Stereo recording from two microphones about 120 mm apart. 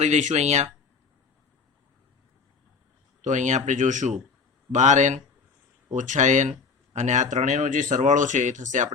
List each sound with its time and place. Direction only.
0.0 s speech: 85° right
3.2 s speech: 90° right